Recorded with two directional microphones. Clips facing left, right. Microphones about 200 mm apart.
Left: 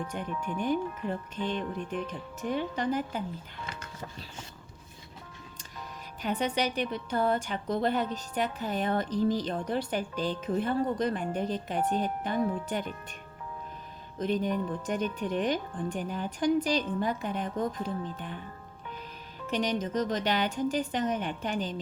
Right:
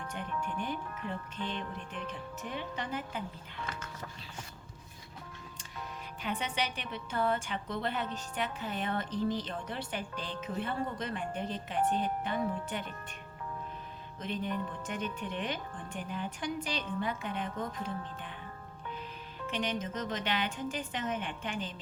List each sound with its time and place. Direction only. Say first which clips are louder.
0.6 s speech: left 8 dB; 40° left (ahead or behind)
6.2 s speech: left 6 dB; 40° left (ahead or behind)
14.2 s speech: left 7 dB; 40° left (ahead or behind)
19.5 s speech: left 5 dB; 40° left (ahead or behind)